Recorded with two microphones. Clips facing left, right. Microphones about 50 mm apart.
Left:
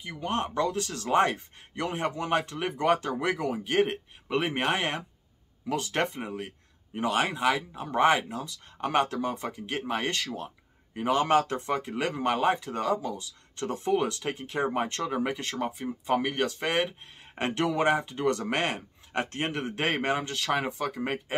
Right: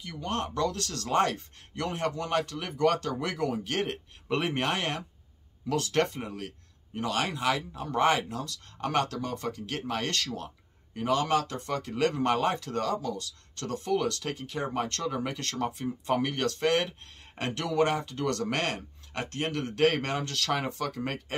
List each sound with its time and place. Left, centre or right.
0.0 s speech: centre
17.4 s speech: left